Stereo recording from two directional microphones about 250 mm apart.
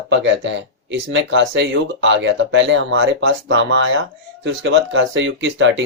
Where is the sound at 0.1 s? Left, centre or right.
Right.